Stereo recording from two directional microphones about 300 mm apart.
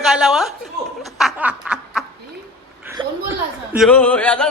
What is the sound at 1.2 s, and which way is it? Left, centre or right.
Snicker, centre.